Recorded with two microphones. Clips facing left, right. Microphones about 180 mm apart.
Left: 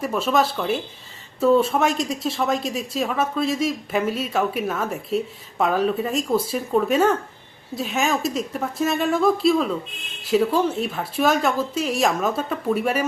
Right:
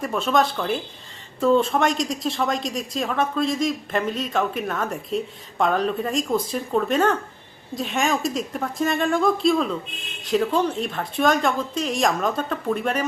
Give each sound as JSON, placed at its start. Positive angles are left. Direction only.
{"t": 0.0, "sound": "speech", "side_deg": 5}